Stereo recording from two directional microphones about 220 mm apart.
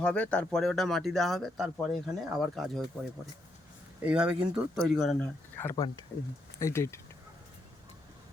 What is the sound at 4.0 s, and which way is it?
Speech, 5° right (ahead or behind).